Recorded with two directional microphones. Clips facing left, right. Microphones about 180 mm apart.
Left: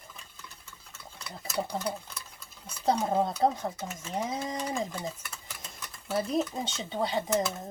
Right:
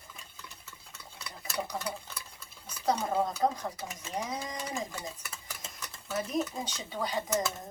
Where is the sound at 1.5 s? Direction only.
30° left (ahead or behind).